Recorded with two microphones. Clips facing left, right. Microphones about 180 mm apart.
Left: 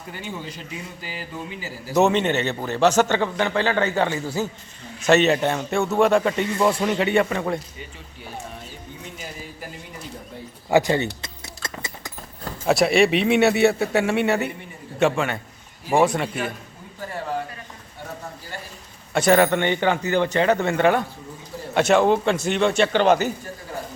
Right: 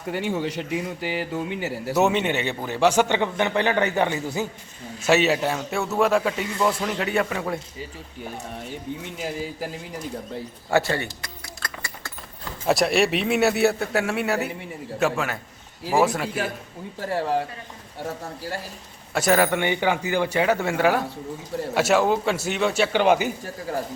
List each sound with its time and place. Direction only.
0.1 s a man's voice: 75° right (ahead or behind)
1.9 s a man's voice: 10° right (ahead or behind)
5.0 s a man's voice: 5° right (ahead or behind)
10.7 s a sound: 15° left (ahead or behind)
12.6 s a man's voice: centre (ahead or behind)
17.0 s speech: 85° right
19.1 s a man's voice: 5° right (ahead or behind)